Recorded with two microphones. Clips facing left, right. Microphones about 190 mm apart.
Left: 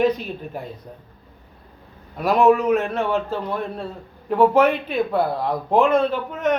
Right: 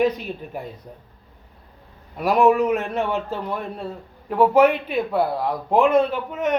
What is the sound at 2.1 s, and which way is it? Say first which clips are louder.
A man's voice: left 1 dB; 10° right (ahead or behind).